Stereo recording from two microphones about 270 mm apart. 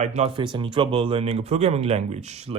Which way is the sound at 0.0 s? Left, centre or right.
Right.